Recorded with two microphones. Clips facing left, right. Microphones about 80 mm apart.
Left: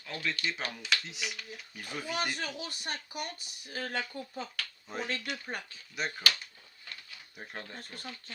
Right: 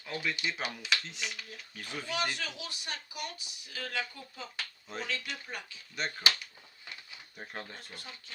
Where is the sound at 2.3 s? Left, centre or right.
Left.